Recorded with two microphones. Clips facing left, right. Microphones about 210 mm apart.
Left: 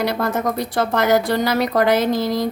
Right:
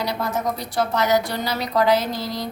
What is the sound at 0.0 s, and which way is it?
A woman's voice, 55° left (ahead or behind).